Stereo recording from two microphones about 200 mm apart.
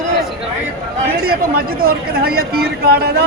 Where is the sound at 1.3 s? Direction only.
50° right (ahead or behind).